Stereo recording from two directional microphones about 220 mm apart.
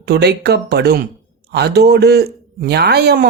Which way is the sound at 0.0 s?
45° right (ahead or behind).